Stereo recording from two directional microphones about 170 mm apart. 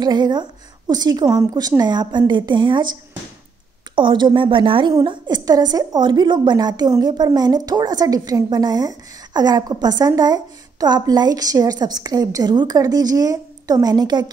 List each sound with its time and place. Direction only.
0.0 s a woman's voice: 25° right (ahead or behind)